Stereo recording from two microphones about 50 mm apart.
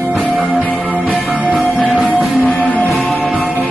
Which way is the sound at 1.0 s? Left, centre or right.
Centre.